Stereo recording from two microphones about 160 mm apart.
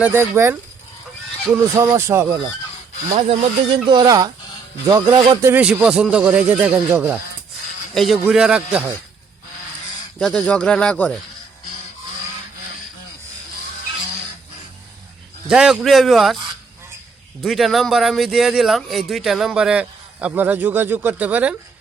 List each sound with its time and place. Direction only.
0.0 s speech: 15° right (ahead or behind)
1.7 s speech: 15° right (ahead or behind)
3.1 s speech: 40° right (ahead or behind)
3.8 s speech: 25° right (ahead or behind)
5.5 s a man's voice: 15° right (ahead or behind)
10.2 s speech: 5° left (ahead or behind)
15.4 s a man's voice: 5° right (ahead or behind)
17.4 s a man's voice: centre (ahead or behind)